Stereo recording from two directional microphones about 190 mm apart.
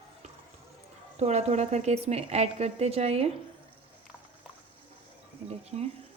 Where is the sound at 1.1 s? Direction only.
35° right (ahead or behind).